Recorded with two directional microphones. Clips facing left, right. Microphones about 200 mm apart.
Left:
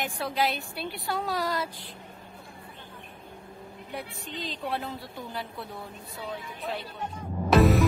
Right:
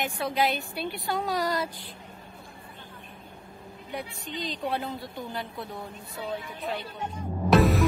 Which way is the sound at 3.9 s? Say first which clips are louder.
Right 2 dB; centre (ahead or behind).